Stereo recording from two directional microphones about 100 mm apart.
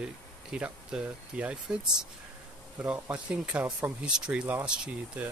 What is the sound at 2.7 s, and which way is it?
Speech, 15° right (ahead or behind).